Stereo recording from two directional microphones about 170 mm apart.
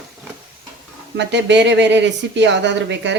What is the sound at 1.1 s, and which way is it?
A woman's voice, 90° right.